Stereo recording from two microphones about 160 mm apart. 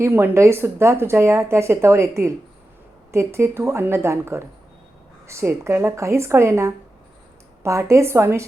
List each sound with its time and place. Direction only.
0.0 s a woman's voice: 15° right (ahead or behind)